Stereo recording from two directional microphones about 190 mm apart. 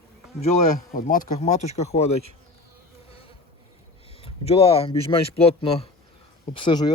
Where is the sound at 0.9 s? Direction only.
45° left (ahead or behind).